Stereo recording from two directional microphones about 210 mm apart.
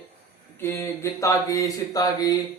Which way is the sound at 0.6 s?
10° left (ahead or behind).